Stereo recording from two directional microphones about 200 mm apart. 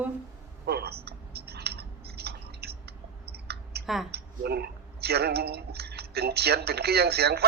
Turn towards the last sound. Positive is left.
turn(degrees=-55)  # may be behind; listen again after turning